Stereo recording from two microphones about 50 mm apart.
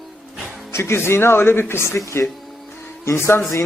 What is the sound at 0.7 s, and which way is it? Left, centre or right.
A man's voice, left.